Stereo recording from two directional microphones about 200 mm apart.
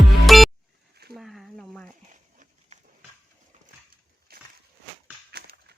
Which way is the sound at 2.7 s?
35° right (ahead or behind).